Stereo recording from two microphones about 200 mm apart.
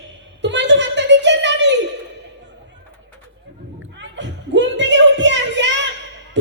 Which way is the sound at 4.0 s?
65° right (ahead or behind).